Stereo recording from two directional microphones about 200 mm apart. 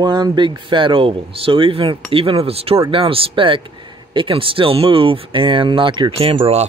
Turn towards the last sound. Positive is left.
turn(degrees=-30)  # may be behind; listen again after turning